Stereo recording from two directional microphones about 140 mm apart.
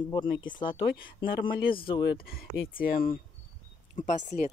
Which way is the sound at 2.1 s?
90° left.